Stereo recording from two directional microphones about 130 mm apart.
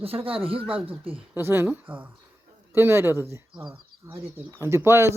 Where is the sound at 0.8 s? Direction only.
45° right (ahead or behind).